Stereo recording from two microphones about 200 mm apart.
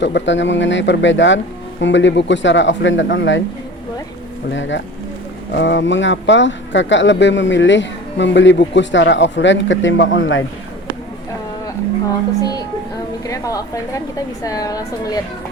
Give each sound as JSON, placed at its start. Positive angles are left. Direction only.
{"t": 0.0, "sound": "speech", "side_deg": 65}
{"t": 4.5, "sound": "speech", "side_deg": 65}
{"t": 12.4, "sound": "a woman's voice", "side_deg": 20}